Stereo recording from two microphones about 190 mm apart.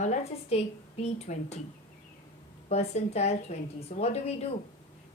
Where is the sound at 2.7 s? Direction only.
35° left (ahead or behind).